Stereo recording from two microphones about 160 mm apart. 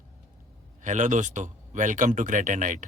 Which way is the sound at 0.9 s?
50° right (ahead or behind).